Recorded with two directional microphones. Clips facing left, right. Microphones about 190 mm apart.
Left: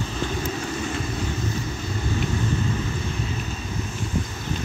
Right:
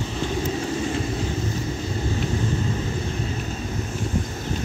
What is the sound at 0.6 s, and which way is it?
Vehicle, 30° right (ahead or behind).